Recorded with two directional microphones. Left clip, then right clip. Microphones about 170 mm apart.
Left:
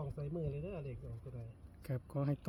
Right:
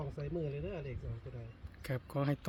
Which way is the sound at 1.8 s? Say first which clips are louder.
Right 4 dB; 5° right (ahead or behind).